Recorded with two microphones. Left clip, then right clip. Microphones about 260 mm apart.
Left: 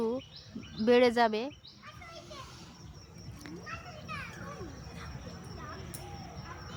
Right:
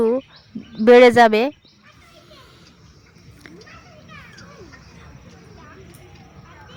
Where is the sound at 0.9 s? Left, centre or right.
Right.